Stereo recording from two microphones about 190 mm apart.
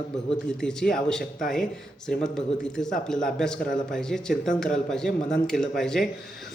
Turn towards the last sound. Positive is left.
turn(degrees=5)  # may be behind; listen again after turning